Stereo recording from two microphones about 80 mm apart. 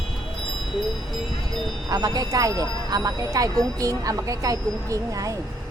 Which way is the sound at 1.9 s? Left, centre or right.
Right.